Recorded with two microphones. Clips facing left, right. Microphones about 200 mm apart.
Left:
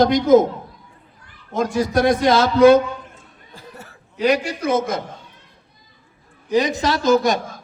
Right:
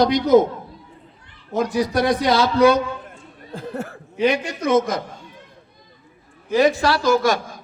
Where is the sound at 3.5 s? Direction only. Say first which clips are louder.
Right 12 dB; 50° right (ahead or behind).